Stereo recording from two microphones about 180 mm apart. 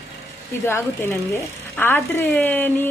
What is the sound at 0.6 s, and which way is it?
Speech, 15° left (ahead or behind).